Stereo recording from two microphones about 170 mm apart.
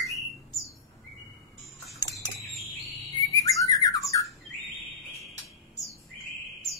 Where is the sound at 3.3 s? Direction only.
20° left (ahead or behind).